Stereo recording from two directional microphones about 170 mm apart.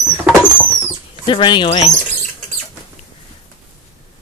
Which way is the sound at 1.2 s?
30° left (ahead or behind).